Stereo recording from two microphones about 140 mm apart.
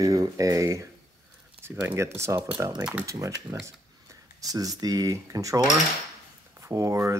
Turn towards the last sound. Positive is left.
turn(degrees=-20)  # may be behind; listen again after turning